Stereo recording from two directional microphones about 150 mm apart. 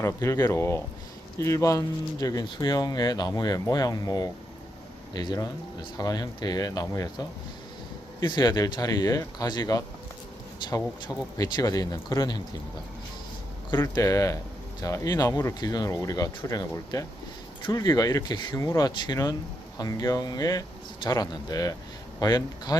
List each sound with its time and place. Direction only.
0.0 s speech: 20° left (ahead or behind)
11.3 s speech: 30° left (ahead or behind)
13.7 s speech: 20° left (ahead or behind)